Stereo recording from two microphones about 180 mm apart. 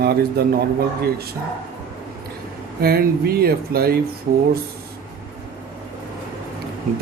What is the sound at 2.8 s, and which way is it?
Speech, 60° right (ahead or behind).